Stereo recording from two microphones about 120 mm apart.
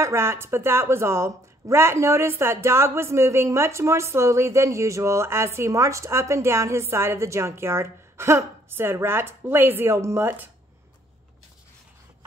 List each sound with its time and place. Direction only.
0.0 s a woman's voice: 20° right (ahead or behind)